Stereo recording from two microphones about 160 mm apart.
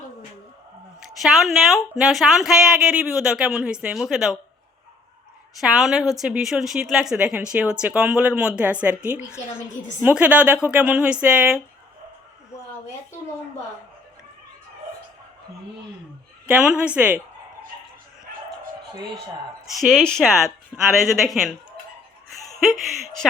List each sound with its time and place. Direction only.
1.2 s speech: centre (ahead or behind)
5.5 s speech: centre (ahead or behind)
10.0 s speech: 10° right (ahead or behind)
16.6 s speech: 5° right (ahead or behind)
19.8 s speech: 5° left (ahead or behind)
22.5 s speech: centre (ahead or behind)